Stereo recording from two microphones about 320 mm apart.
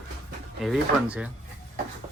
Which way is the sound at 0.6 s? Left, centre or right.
Centre.